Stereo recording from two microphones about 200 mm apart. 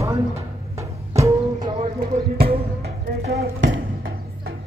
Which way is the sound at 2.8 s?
55° right (ahead or behind).